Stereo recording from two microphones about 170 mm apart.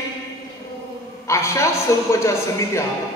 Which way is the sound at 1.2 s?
15° left (ahead or behind).